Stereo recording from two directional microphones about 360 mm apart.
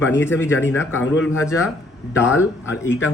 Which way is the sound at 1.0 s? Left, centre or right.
Left.